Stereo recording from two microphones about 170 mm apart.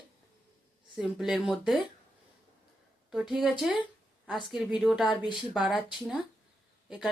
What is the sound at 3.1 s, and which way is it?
Speech, 5° right (ahead or behind).